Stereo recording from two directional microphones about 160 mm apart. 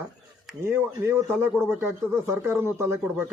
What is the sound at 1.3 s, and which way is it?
Speech, 5° left (ahead or behind).